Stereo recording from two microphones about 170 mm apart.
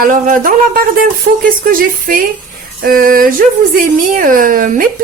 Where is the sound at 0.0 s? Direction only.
50° right (ahead or behind).